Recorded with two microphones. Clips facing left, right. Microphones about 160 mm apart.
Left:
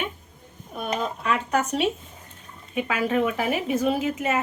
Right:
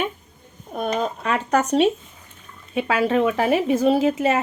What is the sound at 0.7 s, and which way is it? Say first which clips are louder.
Speech: right 4 dB; 40° right (ahead or behind).